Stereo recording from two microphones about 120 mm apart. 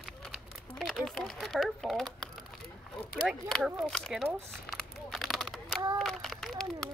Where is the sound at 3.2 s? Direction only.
Centre (ahead or behind).